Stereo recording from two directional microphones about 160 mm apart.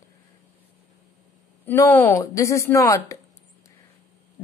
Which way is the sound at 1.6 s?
15° left (ahead or behind).